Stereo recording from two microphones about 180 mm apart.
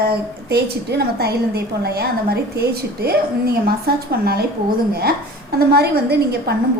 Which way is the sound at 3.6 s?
60° right (ahead or behind).